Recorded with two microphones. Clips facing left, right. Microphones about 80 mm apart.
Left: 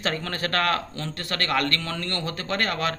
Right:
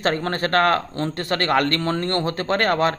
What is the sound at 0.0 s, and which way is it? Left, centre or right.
Speech, right.